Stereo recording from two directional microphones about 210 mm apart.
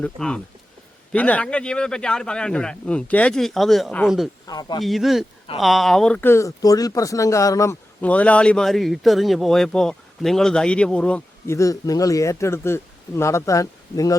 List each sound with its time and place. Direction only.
0.0 s a man's voice: 5° left (ahead or behind)
4.4 s speech: 20° left (ahead or behind)
4.8 s a man's voice: centre (ahead or behind); by 14.2 s 15° left (ahead or behind)